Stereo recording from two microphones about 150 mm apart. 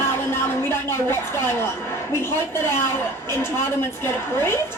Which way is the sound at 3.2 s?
15° left (ahead or behind).